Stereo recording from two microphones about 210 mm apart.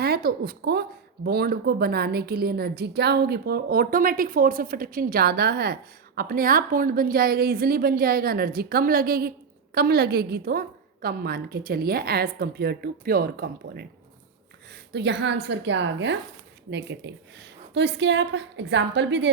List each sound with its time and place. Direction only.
0.0 s speech: 45° right (ahead or behind)
14.9 s a woman's voice: 55° right (ahead or behind)